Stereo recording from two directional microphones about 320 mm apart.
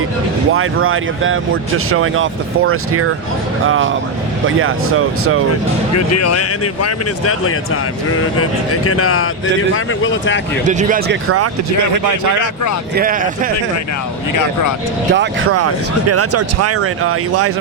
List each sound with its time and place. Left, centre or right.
0.5 s speech: right
6.1 s speech: left
10.7 s speech: right
13.0 s speech: right
15.1 s speech: right
15.5 s speech: right